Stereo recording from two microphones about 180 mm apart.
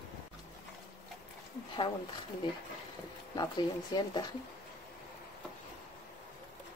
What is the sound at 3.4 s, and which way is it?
Speech, 25° left (ahead or behind).